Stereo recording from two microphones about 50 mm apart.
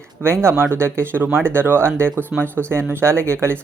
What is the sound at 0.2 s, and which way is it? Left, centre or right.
Speech, right.